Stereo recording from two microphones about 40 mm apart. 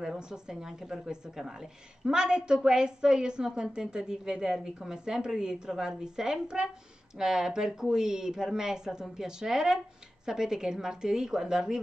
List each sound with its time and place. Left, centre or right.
0.0 s a woman's voice: centre